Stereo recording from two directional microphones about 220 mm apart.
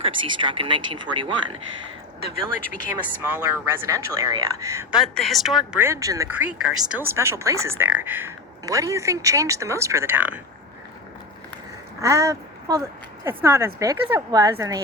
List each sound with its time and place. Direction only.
0.0 s speech: 20° right (ahead or behind)
3.2 s speech: 10° right (ahead or behind)
11.9 s speech: 15° right (ahead or behind)